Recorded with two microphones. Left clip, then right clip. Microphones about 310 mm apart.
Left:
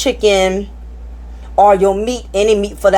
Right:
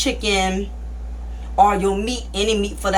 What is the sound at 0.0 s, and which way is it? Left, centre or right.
Speech, centre.